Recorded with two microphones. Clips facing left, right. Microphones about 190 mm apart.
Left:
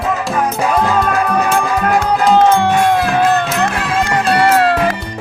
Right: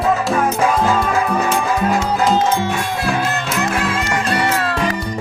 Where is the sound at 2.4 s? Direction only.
60° left (ahead or behind).